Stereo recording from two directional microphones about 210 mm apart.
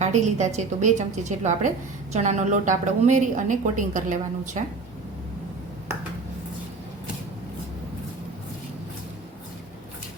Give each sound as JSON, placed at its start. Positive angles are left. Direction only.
{"t": 0.0, "sound": "a woman's voice", "side_deg": -35}